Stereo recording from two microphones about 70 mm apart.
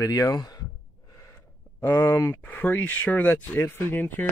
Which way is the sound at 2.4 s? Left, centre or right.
Left.